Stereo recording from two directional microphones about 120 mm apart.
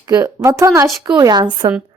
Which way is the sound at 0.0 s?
30° right (ahead or behind).